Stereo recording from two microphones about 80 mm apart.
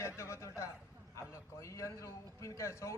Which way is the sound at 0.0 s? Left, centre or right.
Left.